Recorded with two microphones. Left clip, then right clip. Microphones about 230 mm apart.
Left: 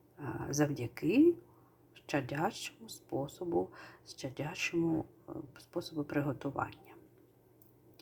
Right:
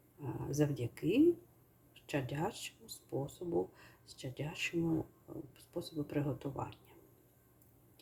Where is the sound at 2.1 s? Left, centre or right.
Centre.